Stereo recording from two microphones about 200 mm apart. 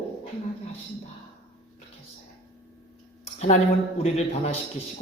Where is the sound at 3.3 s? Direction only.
30° left (ahead or behind).